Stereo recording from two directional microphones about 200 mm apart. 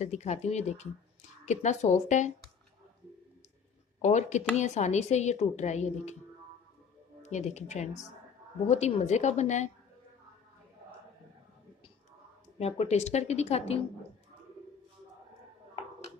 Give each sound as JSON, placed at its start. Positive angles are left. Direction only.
{"t": 0.0, "sound": "speech", "side_deg": 35}
{"t": 4.0, "sound": "speech", "side_deg": 35}
{"t": 7.2, "sound": "speech", "side_deg": 35}
{"t": 12.5, "sound": "speech", "side_deg": 30}